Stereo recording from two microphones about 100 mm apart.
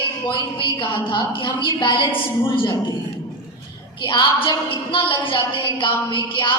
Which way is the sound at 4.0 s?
55° left (ahead or behind).